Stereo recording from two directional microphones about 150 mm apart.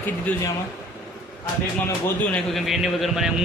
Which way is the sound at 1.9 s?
10° left (ahead or behind).